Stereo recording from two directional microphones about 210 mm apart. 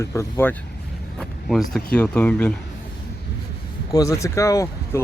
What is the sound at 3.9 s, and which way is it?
Speech, 15° left (ahead or behind).